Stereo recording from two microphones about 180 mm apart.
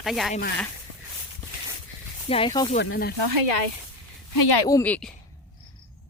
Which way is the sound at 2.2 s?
30° left (ahead or behind).